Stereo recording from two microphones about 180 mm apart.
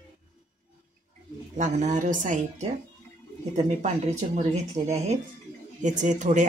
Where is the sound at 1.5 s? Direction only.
45° right (ahead or behind).